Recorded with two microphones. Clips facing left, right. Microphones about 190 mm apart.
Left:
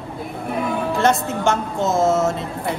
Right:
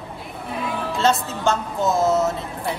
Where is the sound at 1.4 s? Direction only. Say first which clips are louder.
Even; 20° left (ahead or behind).